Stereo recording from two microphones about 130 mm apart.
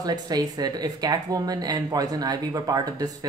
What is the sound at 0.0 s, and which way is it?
Speech, 30° right (ahead or behind).